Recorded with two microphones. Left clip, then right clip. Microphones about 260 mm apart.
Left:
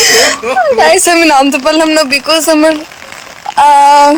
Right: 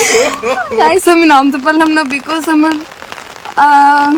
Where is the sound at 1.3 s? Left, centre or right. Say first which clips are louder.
Left 1 dB; left.